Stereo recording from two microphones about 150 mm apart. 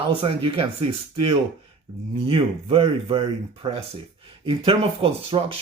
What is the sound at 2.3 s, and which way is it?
Speech, 40° right (ahead or behind).